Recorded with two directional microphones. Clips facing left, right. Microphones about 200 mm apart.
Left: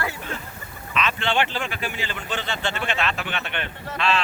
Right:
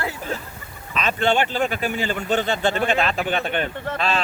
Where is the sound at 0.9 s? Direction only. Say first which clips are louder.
Right 4 dB; 45° right (ahead or behind).